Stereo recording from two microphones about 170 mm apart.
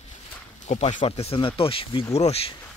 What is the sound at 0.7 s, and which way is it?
Speech, 45° left (ahead or behind).